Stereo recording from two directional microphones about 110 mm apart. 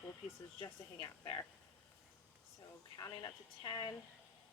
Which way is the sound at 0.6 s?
45° left (ahead or behind).